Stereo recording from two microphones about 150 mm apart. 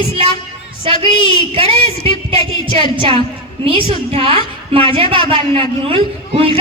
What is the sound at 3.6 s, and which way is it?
A woman's voice, 35° right (ahead or behind).